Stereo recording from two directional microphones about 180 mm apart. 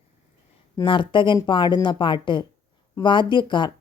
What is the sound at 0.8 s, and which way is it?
Speech, 25° left (ahead or behind).